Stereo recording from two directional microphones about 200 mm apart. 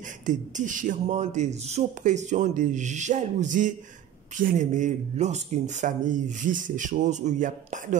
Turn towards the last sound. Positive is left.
turn(degrees=-40)  # may be behind; listen again after turning